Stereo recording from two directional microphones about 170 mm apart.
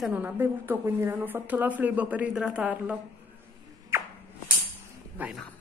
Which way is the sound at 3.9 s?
15° right (ahead or behind).